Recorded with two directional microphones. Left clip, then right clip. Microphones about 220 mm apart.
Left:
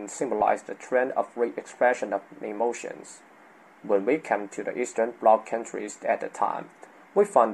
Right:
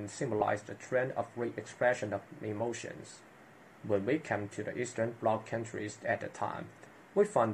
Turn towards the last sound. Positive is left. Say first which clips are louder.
# left 8 dB
turn(degrees=25)  # may be behind; listen again after turning